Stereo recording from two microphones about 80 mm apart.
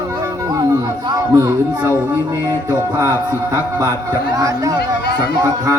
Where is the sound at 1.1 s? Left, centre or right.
Right.